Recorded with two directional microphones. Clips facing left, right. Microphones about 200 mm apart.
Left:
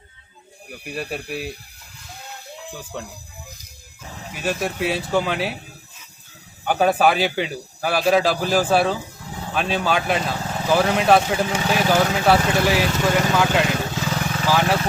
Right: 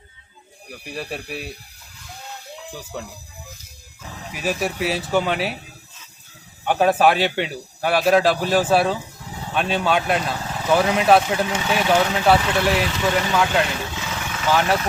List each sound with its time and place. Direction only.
0.7 s speech: centre (ahead or behind)
2.9 s speech: 5° right (ahead or behind)
4.3 s speech: centre (ahead or behind)
6.7 s speech: centre (ahead or behind)
13.9 s vehicle: 40° left (ahead or behind)